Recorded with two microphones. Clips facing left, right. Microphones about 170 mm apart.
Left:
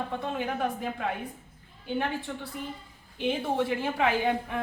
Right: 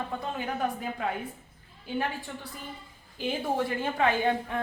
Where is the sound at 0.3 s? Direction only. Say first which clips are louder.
Left 1 dB; centre (ahead or behind).